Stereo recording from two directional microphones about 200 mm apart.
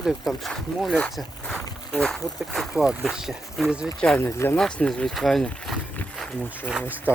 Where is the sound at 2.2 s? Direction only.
20° left (ahead or behind).